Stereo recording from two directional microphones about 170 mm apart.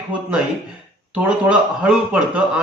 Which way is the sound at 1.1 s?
5° right (ahead or behind).